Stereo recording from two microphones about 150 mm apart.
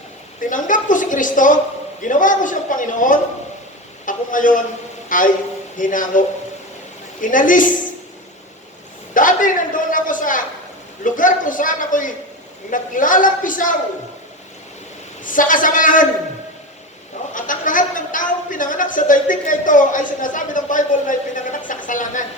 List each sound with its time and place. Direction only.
0.5 s a man's voice: 60° left (ahead or behind)
9.1 s a man's voice: 60° left (ahead or behind)
15.2 s a man's voice: 60° left (ahead or behind)
17.3 s a man's voice: 65° left (ahead or behind)